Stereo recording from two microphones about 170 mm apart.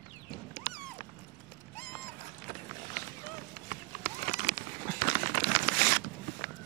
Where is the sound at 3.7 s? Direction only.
60° right (ahead or behind).